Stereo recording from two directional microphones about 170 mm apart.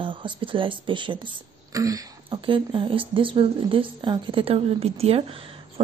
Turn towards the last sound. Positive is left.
turn(degrees=-30)  # may be behind; listen again after turning